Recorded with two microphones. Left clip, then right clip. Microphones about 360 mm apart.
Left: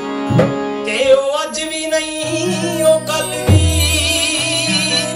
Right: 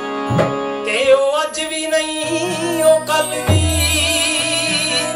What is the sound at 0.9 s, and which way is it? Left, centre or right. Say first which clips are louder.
Music: left 1 dB; centre.